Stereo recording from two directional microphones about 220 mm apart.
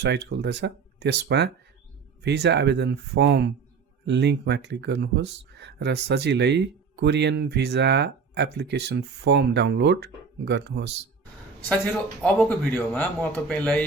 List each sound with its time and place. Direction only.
0.0 s speech: 50° right (ahead or behind)
12.2 s speech: 10° left (ahead or behind)